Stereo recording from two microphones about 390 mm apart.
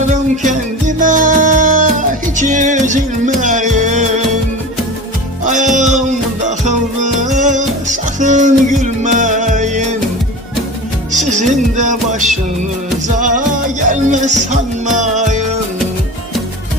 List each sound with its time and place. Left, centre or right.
0.1 s music: centre
5.5 s music: centre
11.1 s music: centre